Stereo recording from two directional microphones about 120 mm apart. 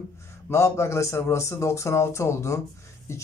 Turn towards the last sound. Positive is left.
turn(degrees=20)  # may be behind; listen again after turning